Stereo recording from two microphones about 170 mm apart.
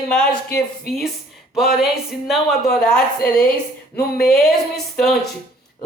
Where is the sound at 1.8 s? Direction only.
Centre (ahead or behind).